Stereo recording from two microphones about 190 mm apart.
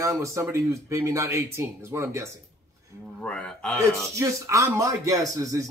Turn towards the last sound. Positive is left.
turn(degrees=-15)  # may be behind; listen again after turning